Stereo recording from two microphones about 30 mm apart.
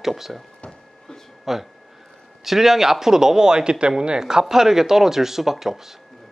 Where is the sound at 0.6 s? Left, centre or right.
Centre.